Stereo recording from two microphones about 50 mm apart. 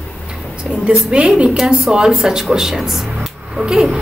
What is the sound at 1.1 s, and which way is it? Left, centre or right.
A woman's voice, centre.